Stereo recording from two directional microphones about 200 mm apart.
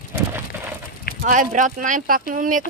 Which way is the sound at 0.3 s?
10° right (ahead or behind).